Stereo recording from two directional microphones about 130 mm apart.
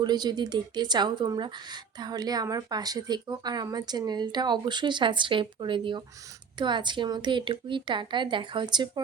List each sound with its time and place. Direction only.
0.0 s speech: 35° right (ahead or behind)